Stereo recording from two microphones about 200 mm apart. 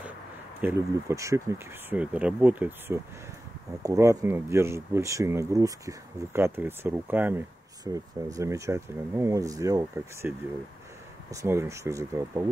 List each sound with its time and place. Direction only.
0.6 s speech: 10° right (ahead or behind)
11.3 s speech: 15° right (ahead or behind)